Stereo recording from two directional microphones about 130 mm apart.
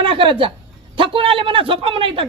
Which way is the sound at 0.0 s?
40° right (ahead or behind).